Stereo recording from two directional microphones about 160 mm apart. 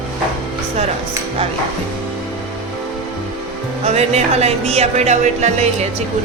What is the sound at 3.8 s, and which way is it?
Speech, 40° right (ahead or behind).